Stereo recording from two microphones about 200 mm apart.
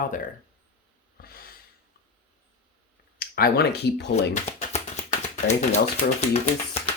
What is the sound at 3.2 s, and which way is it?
Speech, 45° left (ahead or behind).